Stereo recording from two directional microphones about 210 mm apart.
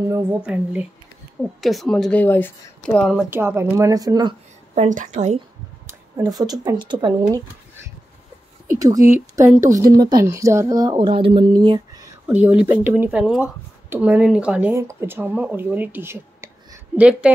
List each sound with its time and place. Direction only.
0.1 s a woman's voice: 10° right (ahead or behind)
4.8 s a woman's voice: 40° right (ahead or behind)
5.9 s speech: 20° right (ahead or behind)
8.6 s speech: 15° right (ahead or behind)
12.3 s speech: 5° right (ahead or behind)